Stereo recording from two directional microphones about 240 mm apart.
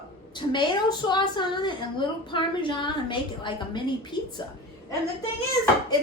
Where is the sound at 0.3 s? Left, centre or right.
Centre.